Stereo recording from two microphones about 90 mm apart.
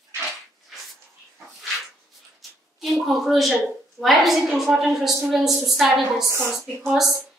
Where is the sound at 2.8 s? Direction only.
Centre (ahead or behind).